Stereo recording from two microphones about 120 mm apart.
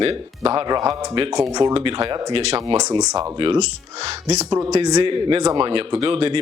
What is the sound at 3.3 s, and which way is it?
Speech, 50° right (ahead or behind).